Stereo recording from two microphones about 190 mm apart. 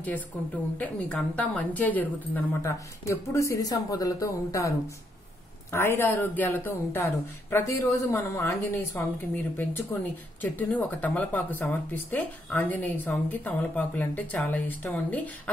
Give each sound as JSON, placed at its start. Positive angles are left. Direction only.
{"t": 0.7, "sound": "speech", "side_deg": 5}